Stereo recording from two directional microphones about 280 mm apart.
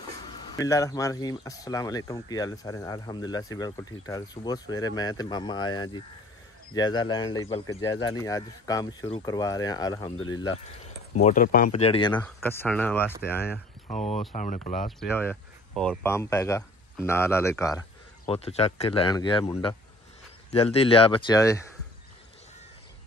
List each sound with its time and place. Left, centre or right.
0.3 s speech: centre
11.1 s speech: left
12.4 s speech: centre
13.8 s speech: left
14.9 s speech: centre